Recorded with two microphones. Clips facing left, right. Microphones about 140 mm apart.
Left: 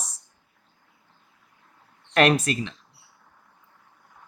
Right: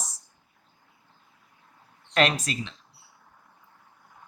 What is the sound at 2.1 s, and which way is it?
Speech, 55° left (ahead or behind).